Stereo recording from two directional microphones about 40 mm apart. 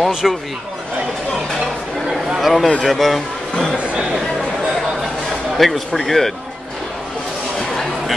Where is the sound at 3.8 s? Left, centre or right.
Right.